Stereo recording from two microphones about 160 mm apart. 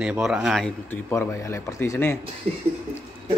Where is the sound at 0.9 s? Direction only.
15° left (ahead or behind).